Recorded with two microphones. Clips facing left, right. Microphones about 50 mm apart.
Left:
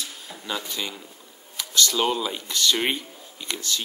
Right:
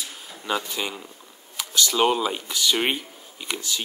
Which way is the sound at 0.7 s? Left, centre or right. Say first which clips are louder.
Right 2 dB; centre.